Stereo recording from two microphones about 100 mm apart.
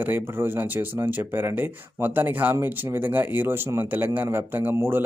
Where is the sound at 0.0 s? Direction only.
20° right (ahead or behind).